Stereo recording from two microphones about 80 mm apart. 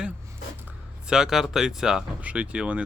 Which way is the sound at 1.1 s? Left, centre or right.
Centre.